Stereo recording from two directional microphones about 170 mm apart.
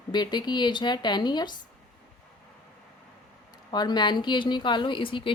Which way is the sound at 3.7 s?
25° left (ahead or behind).